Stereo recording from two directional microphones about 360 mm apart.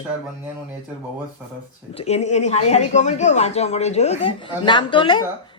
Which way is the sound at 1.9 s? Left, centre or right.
Centre.